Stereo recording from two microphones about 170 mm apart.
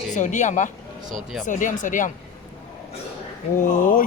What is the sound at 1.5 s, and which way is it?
Speech, 50° left (ahead or behind).